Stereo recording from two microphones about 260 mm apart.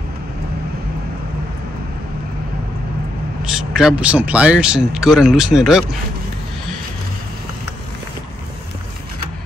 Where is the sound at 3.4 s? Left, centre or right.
Centre.